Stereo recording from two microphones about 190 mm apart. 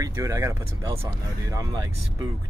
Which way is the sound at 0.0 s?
15° right (ahead or behind).